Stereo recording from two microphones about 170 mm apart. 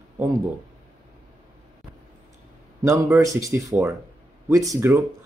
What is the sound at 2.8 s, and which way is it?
Speech, 20° right (ahead or behind).